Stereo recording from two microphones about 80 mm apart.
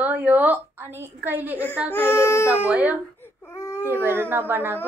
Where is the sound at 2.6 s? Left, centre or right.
Centre.